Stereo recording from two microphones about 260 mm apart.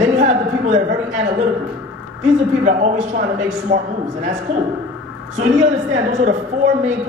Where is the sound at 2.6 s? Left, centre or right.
Right.